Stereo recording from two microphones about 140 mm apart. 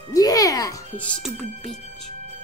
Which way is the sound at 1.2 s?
Centre (ahead or behind).